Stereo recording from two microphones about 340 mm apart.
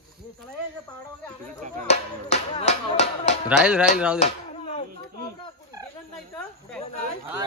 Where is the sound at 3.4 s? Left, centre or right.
Centre.